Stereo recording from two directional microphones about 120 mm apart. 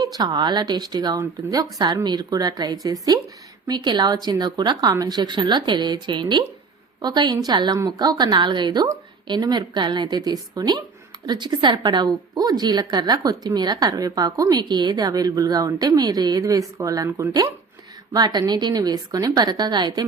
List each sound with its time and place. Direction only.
0.0 s a woman's voice: 35° right (ahead or behind)